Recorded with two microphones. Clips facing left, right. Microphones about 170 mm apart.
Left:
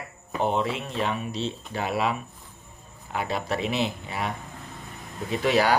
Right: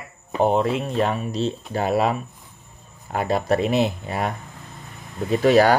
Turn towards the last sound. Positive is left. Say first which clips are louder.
# right 7 dB
turn(degrees=-45)  # may be behind; listen again after turning